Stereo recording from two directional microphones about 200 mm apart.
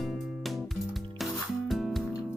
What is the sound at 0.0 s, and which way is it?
Music, centre (ahead or behind).